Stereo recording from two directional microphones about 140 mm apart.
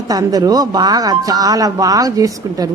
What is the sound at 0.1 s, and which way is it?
A woman's voice, 25° right (ahead or behind).